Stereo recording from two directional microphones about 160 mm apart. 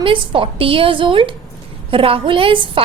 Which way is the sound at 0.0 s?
35° right (ahead or behind).